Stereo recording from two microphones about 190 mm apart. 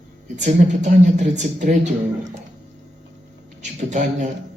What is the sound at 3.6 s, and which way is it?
Speech, 40° right (ahead or behind).